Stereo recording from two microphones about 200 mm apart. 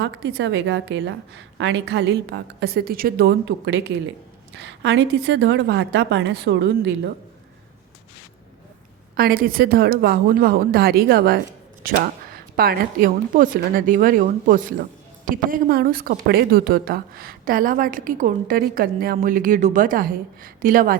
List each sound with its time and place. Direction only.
0.0 s a woman's voice: 60° right (ahead or behind)
4.5 s a woman's voice: 65° right (ahead or behind)
9.1 s speech: 50° right (ahead or behind)